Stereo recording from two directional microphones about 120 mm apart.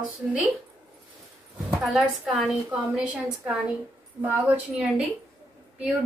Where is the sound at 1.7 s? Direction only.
Centre (ahead or behind).